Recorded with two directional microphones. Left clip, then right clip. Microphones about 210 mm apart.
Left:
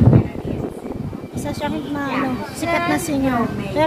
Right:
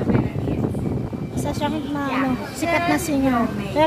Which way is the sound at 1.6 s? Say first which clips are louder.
Left 2 dB; 5° right (ahead or behind).